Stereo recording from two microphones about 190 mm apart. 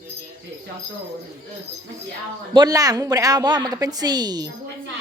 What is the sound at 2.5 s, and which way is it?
A woman's voice, 20° right (ahead or behind).